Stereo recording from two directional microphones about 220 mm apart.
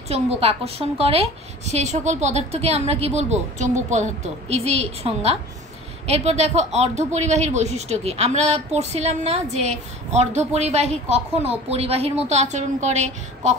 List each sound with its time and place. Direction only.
0.1 s speech: 25° right (ahead or behind)